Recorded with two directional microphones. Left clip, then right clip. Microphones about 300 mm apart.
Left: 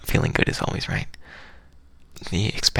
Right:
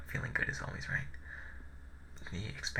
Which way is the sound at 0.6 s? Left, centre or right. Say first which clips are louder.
Left 11 dB; left.